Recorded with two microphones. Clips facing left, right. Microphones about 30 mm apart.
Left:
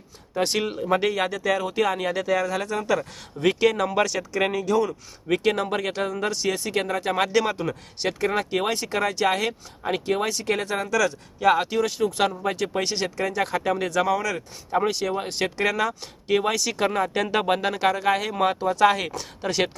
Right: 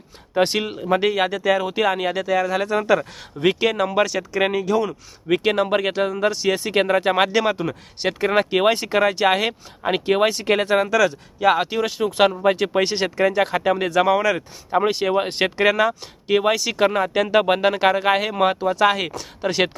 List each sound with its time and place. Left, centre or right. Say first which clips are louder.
0.5 s speech: right 2 dB; centre
3.4 s speech: right 2 dB; centre
6.5 s speech: right 9 dB; right
7.5 s speech: right 3 dB; centre
8.3 s speech: right 7 dB; right
16.2 s speech: right 4 dB; centre
17.4 s speech: right 5 dB; right